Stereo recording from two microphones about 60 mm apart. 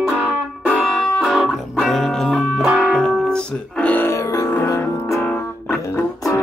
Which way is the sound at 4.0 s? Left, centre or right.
Left.